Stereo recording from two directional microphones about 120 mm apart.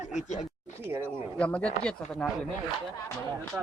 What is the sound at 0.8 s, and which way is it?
Speech, 20° right (ahead or behind).